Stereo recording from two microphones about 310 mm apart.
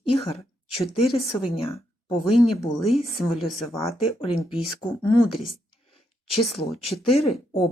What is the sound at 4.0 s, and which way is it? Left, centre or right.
Speech, centre.